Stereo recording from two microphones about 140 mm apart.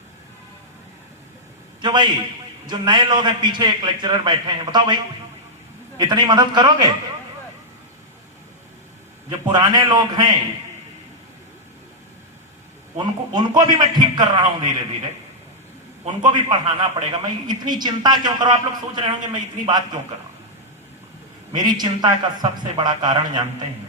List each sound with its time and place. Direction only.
1.8 s a man's voice: 35° right (ahead or behind)
6.0 s a man's voice: 30° right (ahead or behind)
9.5 s a man's voice: 30° right (ahead or behind)
13.0 s a man's voice: 35° right (ahead or behind)
16.3 s a man's voice: 30° right (ahead or behind)
21.6 s a man's voice: 30° right (ahead or behind)